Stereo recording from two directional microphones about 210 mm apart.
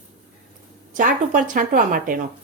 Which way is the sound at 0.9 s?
40° right (ahead or behind).